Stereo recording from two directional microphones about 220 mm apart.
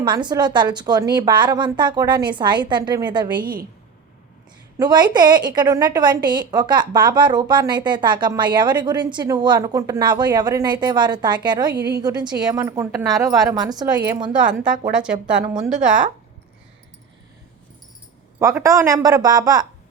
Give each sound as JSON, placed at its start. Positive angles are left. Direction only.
{"t": 0.0, "sound": "a woman's voice", "side_deg": -20}
{"t": 3.4, "sound": "a woman's voice", "side_deg": -40}
{"t": 4.8, "sound": "a woman's voice", "side_deg": -20}
{"t": 14.3, "sound": "a woman's voice", "side_deg": -5}
{"t": 15.4, "sound": "a woman's voice", "side_deg": -15}
{"t": 18.3, "sound": "a woman's voice", "side_deg": -10}